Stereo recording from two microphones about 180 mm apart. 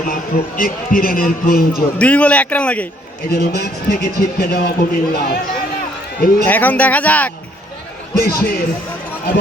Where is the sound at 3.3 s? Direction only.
55° left (ahead or behind).